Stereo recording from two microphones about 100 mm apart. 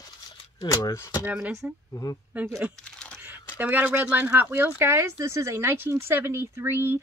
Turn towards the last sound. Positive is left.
turn(degrees=-20)  # may be behind; listen again after turning